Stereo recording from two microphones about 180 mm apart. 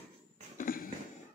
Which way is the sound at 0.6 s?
50° left (ahead or behind).